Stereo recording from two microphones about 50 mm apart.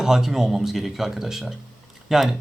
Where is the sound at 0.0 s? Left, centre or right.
Centre.